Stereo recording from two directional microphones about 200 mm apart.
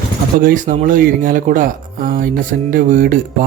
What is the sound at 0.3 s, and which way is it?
Speech, 40° right (ahead or behind).